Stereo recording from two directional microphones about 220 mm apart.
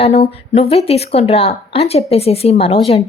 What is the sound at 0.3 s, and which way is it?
A woman's voice, 25° left (ahead or behind).